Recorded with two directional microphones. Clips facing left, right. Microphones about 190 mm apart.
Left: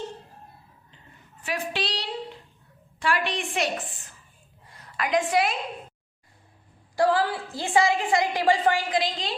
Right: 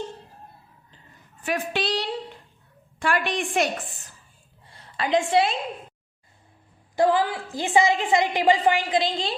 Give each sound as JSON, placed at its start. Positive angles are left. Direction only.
{"t": 1.5, "sound": "a woman's voice", "side_deg": -50}
{"t": 4.6, "sound": "a sound", "side_deg": -30}
{"t": 6.9, "sound": "a woman's voice", "side_deg": -20}